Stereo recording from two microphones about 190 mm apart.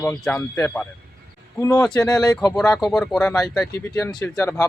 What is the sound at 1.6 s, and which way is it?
Speech, 20° left (ahead or behind).